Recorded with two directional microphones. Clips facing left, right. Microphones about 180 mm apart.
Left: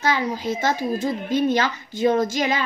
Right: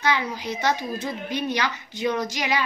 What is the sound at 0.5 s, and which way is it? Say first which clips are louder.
Speech: even; 45° left (ahead or behind).